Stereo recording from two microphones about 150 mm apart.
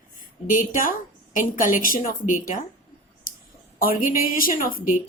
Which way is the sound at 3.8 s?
65° left (ahead or behind).